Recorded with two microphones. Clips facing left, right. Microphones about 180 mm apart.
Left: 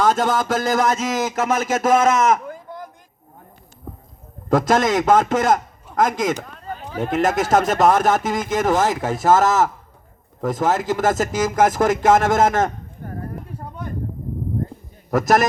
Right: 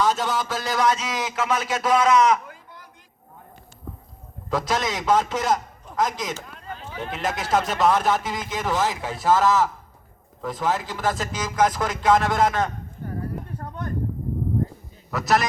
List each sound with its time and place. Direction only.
0.0 s speech: 50° left (ahead or behind)
4.4 s speech: 50° left (ahead or behind)
6.5 s speech: 40° left (ahead or behind)
13.6 s a sound: 10° left (ahead or behind)
15.1 s speech: 50° left (ahead or behind)